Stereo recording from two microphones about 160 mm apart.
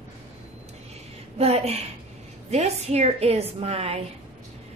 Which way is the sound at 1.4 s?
40° right (ahead or behind).